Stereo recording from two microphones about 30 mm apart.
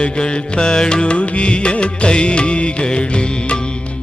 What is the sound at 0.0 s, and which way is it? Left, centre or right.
Music, left.